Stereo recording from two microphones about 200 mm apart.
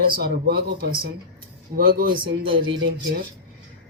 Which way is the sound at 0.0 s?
50° right (ahead or behind).